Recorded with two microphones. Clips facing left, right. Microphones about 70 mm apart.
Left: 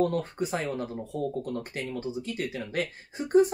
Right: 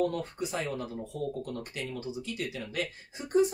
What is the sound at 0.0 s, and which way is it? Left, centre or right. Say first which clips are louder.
Speech: left 3 dB; left.